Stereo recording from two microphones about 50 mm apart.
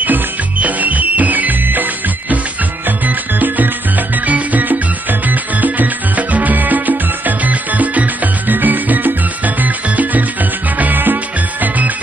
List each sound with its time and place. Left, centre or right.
0.0 s music: right